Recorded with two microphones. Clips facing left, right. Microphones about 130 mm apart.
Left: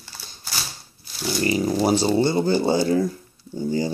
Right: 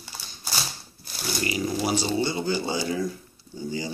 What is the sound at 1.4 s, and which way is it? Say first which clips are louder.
Speech: left 6 dB; 40° left (ahead or behind).